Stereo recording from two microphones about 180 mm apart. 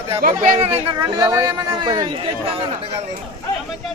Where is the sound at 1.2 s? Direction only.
20° right (ahead or behind).